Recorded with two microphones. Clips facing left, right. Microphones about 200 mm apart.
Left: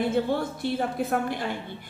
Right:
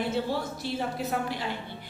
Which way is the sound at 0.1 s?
55° left (ahead or behind).